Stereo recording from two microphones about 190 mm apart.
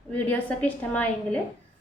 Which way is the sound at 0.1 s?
10° left (ahead or behind).